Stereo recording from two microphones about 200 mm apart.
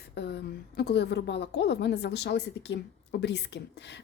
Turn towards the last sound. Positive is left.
turn(degrees=60)  # may be behind; listen again after turning